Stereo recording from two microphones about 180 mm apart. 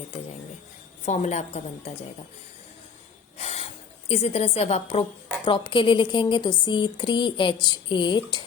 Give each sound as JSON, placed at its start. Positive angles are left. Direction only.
{"t": 1.0, "sound": "a woman's voice", "side_deg": 40}
{"t": 3.3, "sound": "snort", "side_deg": 35}
{"t": 4.1, "sound": "a woman's voice", "side_deg": 35}